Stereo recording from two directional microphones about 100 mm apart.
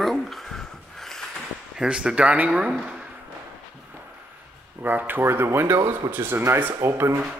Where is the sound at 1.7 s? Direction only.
10° right (ahead or behind).